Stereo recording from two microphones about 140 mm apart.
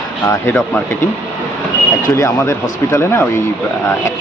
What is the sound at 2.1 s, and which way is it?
Speech, 20° left (ahead or behind).